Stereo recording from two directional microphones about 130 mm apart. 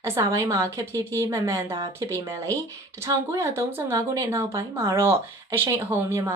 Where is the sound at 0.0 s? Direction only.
25° right (ahead or behind).